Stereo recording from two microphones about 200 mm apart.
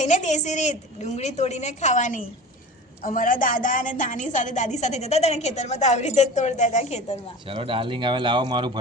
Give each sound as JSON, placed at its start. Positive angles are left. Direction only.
{"t": 0.0, "sound": "a woman's voice", "side_deg": 35}
{"t": 7.4, "sound": "speech", "side_deg": -25}